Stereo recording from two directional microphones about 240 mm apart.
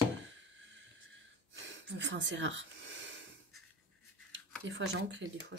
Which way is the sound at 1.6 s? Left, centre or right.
Right.